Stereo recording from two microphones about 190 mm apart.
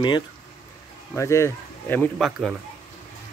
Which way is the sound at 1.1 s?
15° left (ahead or behind).